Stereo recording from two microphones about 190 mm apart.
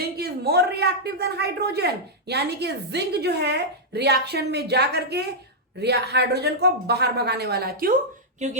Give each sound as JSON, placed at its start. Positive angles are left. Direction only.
{"t": 0.0, "sound": "speech", "side_deg": -55}